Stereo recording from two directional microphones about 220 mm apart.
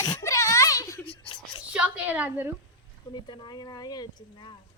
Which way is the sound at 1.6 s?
5° right (ahead or behind).